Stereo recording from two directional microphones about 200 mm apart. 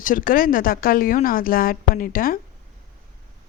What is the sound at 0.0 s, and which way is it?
Speech, 45° left (ahead or behind).